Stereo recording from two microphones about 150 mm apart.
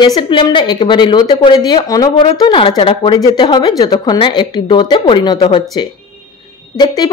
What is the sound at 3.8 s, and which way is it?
A woman's voice, 25° left (ahead or behind).